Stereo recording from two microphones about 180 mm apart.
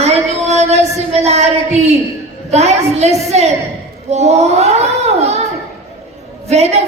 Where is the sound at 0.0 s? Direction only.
35° right (ahead or behind).